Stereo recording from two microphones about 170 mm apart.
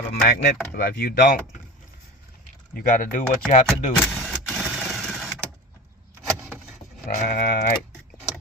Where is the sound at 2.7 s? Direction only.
60° left (ahead or behind).